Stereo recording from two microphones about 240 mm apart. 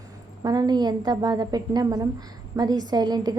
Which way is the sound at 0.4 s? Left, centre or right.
Centre.